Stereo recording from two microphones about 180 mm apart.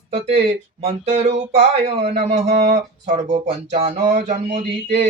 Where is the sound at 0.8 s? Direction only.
35° right (ahead or behind).